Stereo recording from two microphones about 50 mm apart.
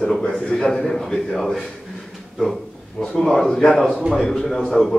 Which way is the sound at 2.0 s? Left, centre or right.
Centre.